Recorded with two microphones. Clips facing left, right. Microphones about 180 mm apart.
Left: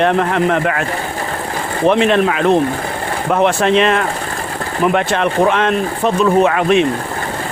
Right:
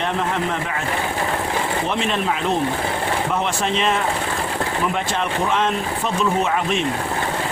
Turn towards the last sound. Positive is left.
turn(degrees=70)  # may be behind; listen again after turning